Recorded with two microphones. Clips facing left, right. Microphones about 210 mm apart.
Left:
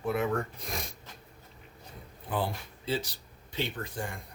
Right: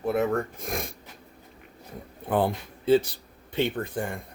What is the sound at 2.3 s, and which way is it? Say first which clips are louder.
Speech: right 8 dB; 55° right (ahead or behind).